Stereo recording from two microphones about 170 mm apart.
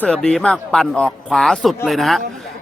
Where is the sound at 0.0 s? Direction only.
5° left (ahead or behind).